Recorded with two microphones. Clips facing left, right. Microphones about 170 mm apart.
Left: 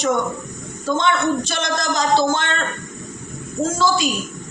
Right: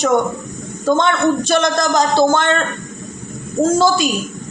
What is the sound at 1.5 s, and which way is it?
A man's voice, 50° right (ahead or behind).